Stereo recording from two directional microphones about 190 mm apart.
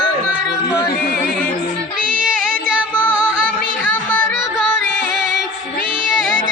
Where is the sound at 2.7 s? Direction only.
10° right (ahead or behind).